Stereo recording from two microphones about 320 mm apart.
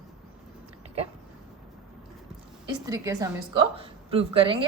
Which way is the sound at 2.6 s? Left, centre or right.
Centre.